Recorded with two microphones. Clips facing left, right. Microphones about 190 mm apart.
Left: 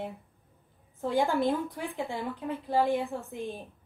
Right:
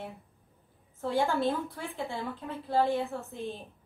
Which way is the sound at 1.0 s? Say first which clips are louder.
Left 1 dB; 15° left (ahead or behind).